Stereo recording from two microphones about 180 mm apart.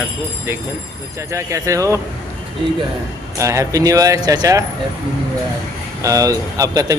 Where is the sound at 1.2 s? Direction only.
15° right (ahead or behind).